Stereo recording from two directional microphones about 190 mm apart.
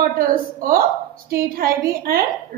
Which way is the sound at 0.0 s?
50° right (ahead or behind).